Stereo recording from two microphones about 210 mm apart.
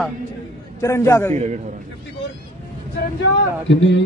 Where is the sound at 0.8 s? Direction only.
15° left (ahead or behind).